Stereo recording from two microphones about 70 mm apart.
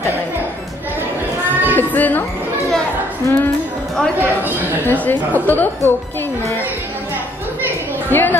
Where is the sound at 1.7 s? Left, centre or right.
Left.